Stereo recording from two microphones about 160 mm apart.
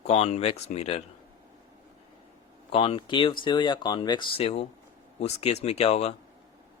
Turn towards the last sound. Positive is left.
turn(degrees=40)  # may be behind; listen again after turning